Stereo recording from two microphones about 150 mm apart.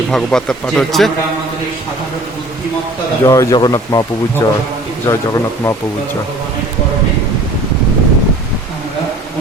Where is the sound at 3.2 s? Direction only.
20° left (ahead or behind).